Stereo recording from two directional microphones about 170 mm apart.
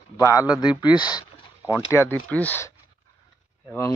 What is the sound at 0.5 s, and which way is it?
Speech, 25° left (ahead or behind).